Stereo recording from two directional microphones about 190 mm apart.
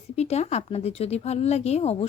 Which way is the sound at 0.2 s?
35° left (ahead or behind).